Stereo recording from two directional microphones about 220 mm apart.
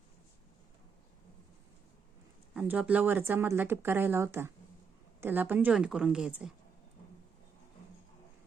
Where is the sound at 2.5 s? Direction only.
5° right (ahead or behind).